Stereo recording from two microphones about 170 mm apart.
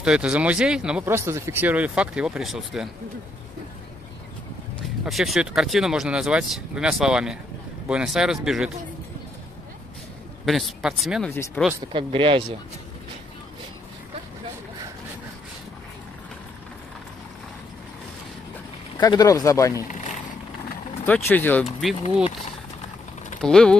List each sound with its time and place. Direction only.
0.0 s speech: 5° right (ahead or behind)
5.0 s speech: centre (ahead or behind)
10.4 s speech: centre (ahead or behind)
11.2 s speech: 10° left (ahead or behind)
11.9 s speech: 30° right (ahead or behind)
18.9 s speech: 20° left (ahead or behind)
21.0 s speech: 10° left (ahead or behind)
23.4 s speech: 5° left (ahead or behind)